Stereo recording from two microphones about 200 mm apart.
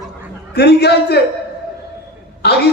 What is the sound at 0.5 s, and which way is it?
Speech, 55° left (ahead or behind).